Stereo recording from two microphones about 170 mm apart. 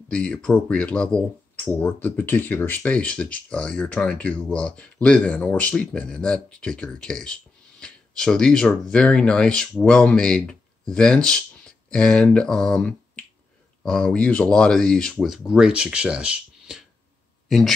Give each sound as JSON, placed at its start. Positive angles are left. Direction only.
{"t": 0.1, "sound": "speech", "side_deg": 5}